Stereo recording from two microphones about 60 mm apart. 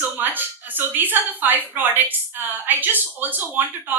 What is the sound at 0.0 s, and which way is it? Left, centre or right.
Speech, right.